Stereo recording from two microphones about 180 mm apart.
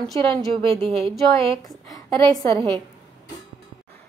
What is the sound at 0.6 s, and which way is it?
Speech, 30° right (ahead or behind).